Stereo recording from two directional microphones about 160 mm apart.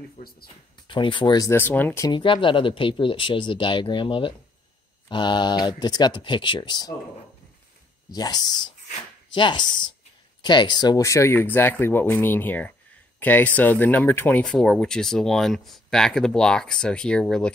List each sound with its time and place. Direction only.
0.2 s speech: 45° left (ahead or behind)
0.8 s speech: 30° left (ahead or behind); by 2.0 s 10° left (ahead or behind)
2.0 s speech: 30° left (ahead or behind)
8.1 s speech: 25° left (ahead or behind); by 17.5 s 5° left (ahead or behind)